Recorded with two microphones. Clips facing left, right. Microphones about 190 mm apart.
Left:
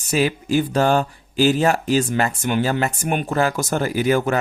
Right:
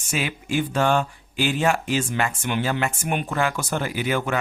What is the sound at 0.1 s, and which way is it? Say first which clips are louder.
Speech: left 7 dB; 40° left (ahead or behind).